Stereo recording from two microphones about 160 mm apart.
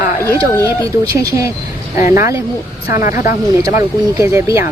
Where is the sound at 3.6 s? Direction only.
20° right (ahead or behind).